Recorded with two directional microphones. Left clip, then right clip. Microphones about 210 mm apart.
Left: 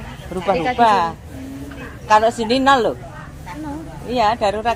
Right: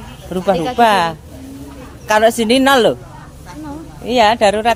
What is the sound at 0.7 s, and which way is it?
Speech, 50° right (ahead or behind).